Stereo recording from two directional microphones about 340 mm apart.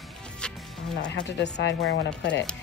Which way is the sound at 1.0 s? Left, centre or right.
Left.